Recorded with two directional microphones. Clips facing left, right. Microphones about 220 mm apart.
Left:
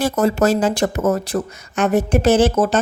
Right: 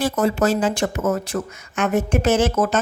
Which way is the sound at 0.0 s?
40° left (ahead or behind).